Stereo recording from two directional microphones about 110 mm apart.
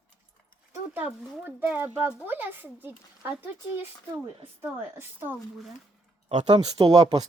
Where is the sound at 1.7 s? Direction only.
20° right (ahead or behind).